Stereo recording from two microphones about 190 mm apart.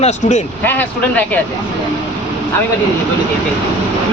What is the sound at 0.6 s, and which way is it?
Speech, 10° left (ahead or behind).